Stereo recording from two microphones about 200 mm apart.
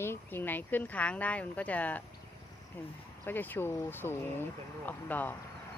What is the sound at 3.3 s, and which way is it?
Speech, 10° left (ahead or behind).